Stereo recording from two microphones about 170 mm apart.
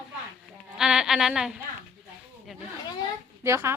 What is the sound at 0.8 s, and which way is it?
Speech, 5° right (ahead or behind).